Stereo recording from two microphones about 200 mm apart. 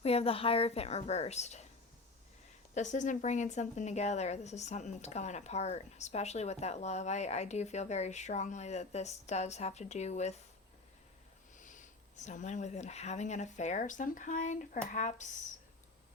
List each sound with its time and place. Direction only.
0.0 s a woman's voice: 30° left (ahead or behind)
2.7 s a woman's voice: 40° left (ahead or behind)
11.5 s a woman's voice: 40° left (ahead or behind)